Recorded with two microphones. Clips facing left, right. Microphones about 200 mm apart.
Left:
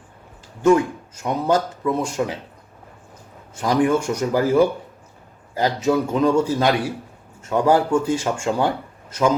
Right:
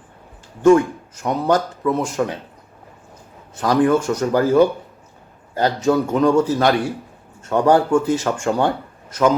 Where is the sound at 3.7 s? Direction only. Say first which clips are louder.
Right 2 dB; 15° left (ahead or behind).